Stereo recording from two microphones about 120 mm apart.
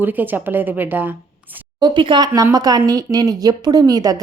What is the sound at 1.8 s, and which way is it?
A woman's voice, 40° right (ahead or behind).